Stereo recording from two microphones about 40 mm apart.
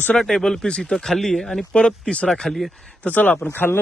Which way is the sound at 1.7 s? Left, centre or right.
Left.